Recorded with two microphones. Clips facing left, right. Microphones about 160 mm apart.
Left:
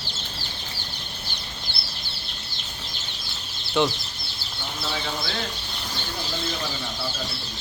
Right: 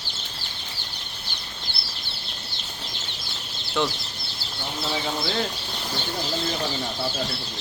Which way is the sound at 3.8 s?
Centre (ahead or behind).